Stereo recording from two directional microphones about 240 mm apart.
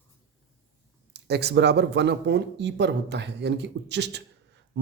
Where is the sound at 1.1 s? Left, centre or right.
Right.